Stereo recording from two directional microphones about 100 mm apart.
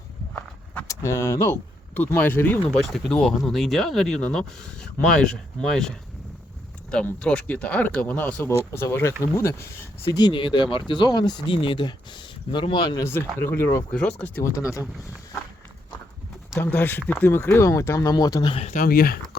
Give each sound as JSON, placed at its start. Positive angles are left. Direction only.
{"t": 0.3, "sound": "walk", "side_deg": 15}
{"t": 0.9, "sound": "speech", "side_deg": 30}
{"t": 2.8, "sound": "speech", "side_deg": 5}
{"t": 6.9, "sound": "speech", "side_deg": 10}
{"t": 10.2, "sound": "speech", "side_deg": 50}
{"t": 13.0, "sound": "speech", "side_deg": 25}
{"t": 13.9, "sound": "speech", "side_deg": 10}
{"t": 14.4, "sound": "speech", "side_deg": 30}
{"t": 16.6, "sound": "speech", "side_deg": 20}